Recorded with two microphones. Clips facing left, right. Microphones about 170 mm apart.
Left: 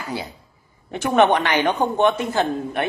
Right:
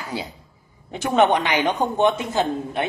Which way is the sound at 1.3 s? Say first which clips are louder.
Left 1 dB; 15° right (ahead or behind).